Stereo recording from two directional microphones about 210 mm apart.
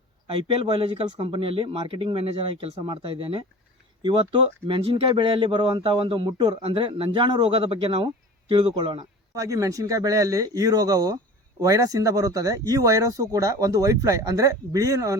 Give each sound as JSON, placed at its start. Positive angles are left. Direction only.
{"t": 0.3, "sound": "speech", "side_deg": -25}